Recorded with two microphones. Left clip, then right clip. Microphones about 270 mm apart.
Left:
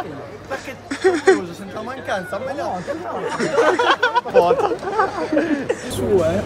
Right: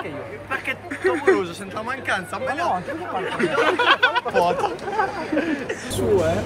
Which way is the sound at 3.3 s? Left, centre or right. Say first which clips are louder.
Left 4 dB; left.